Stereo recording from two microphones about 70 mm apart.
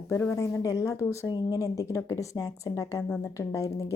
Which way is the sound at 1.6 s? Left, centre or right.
Left.